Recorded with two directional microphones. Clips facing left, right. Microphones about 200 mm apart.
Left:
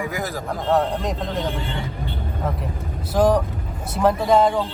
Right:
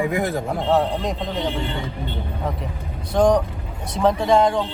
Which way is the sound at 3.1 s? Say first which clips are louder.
Right 1 dB; 5° left (ahead or behind).